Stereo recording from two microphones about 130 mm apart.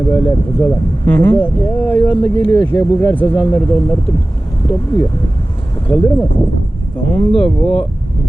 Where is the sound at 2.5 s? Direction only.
15° left (ahead or behind).